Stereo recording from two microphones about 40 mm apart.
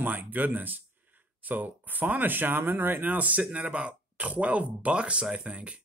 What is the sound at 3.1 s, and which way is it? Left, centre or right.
Speech, right.